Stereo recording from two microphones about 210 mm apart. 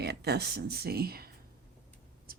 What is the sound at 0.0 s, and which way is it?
Speech, 50° right (ahead or behind).